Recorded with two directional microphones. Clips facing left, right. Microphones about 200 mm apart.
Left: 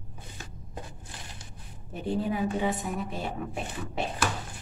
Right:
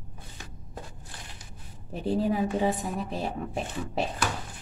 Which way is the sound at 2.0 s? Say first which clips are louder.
Right 2 dB; 35° right (ahead or behind).